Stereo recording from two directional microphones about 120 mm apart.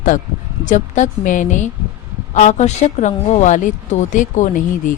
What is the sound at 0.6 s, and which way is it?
A woman's voice, 90° left.